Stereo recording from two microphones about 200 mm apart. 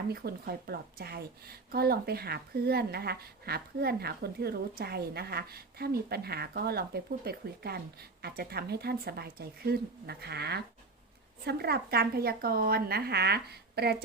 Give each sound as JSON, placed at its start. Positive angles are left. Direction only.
{"t": 0.1, "sound": "speech", "side_deg": -50}